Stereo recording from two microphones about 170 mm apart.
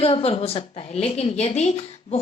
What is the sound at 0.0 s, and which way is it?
A woman's voice, 35° left (ahead or behind).